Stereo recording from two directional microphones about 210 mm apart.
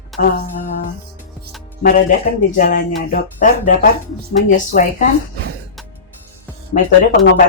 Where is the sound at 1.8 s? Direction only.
40° left (ahead or behind).